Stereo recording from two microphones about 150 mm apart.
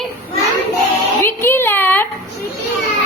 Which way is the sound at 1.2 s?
15° left (ahead or behind).